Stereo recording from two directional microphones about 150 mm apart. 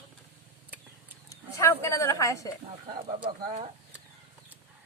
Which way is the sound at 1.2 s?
20° left (ahead or behind).